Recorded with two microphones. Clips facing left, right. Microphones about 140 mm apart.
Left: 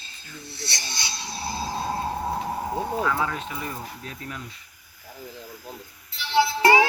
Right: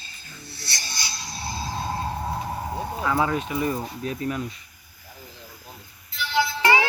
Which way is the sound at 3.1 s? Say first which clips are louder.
Right 4 dB; 20° right (ahead or behind).